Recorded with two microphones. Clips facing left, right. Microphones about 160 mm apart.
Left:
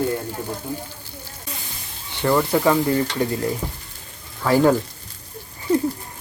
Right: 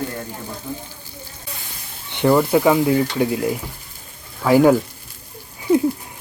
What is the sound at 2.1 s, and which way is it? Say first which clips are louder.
Speech: right 4 dB; 15° right (ahead or behind).